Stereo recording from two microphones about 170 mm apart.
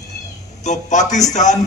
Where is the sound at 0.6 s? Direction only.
45° left (ahead or behind).